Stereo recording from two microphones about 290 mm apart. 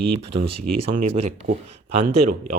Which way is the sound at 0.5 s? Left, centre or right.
Right.